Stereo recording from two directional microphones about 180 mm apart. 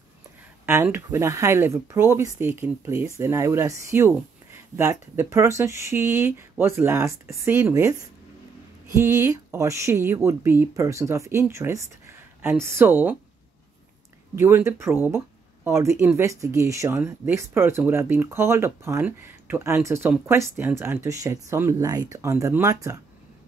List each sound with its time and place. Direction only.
0.7 s speech: 15° right (ahead or behind)
8.9 s speech: 15° right (ahead or behind)
14.3 s speech: 15° right (ahead or behind)